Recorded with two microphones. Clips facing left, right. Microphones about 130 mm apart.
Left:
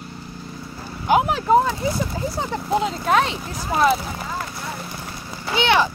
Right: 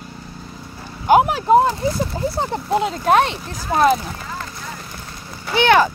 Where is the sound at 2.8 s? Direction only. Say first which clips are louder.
Right 6 dB; 55° right (ahead or behind).